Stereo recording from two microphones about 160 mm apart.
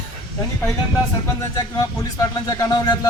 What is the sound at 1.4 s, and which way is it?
Speech, 20° left (ahead or behind).